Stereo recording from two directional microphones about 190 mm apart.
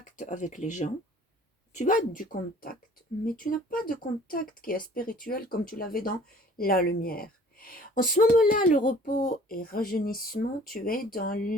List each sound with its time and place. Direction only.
0.2 s speech: 40° left (ahead or behind)